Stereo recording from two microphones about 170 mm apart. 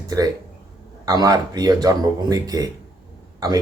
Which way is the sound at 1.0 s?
20° right (ahead or behind).